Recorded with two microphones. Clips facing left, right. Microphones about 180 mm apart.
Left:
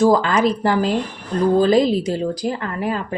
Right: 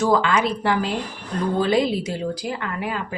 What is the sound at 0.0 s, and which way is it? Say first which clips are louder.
Speech: left 4 dB; 40° left (ahead or behind).